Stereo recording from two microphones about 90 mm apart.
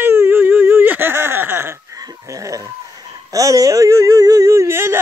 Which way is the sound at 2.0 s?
40° right (ahead or behind).